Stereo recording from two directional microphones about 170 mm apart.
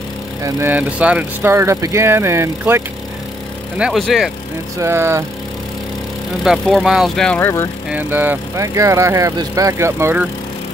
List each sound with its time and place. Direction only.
0.4 s speech: 15° right (ahead or behind)
3.7 s speech: 5° right (ahead or behind)
4.7 s speech: 15° right (ahead or behind)
6.4 s speech: centre (ahead or behind)
7.9 s speech: 10° right (ahead or behind)